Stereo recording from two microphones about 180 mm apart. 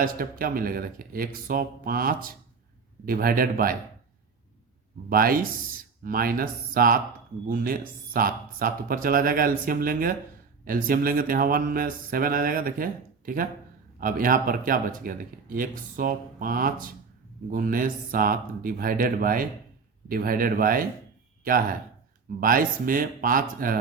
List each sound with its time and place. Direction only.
0.0 s speech: 55° right (ahead or behind)
5.0 s speech: 55° right (ahead or behind)